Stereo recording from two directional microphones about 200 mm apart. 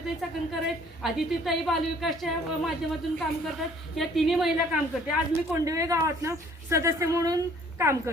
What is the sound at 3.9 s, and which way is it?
Speech, centre (ahead or behind).